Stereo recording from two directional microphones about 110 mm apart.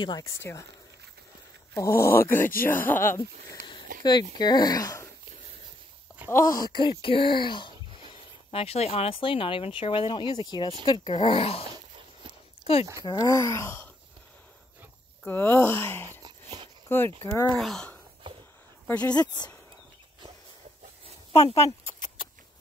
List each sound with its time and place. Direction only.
0.0 s speech: 40° left (ahead or behind)
0.4 s speech: 25° left (ahead or behind)
1.8 s speech: 25° left (ahead or behind)
3.6 s a sound: 45° left (ahead or behind)
4.4 s speech: 40° left (ahead or behind)
6.3 s speech: 30° left (ahead or behind)
8.5 s speech: 65° left (ahead or behind)
13.0 s speech: 35° left (ahead or behind)
15.2 s speech: 20° left (ahead or behind)
17.2 s speech: 30° left (ahead or behind)
17.6 s speech: 5° left (ahead or behind)
19.1 s speech: 40° left (ahead or behind)
21.3 s speech: 65° left (ahead or behind)
21.5 s a sound: 30° left (ahead or behind)